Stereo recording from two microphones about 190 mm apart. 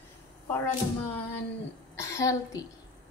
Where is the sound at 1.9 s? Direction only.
15° left (ahead or behind).